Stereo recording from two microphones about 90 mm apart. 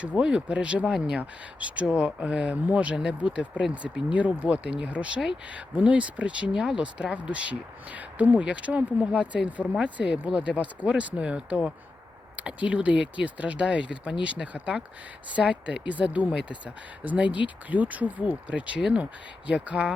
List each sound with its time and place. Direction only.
0.2 s speech: 10° right (ahead or behind)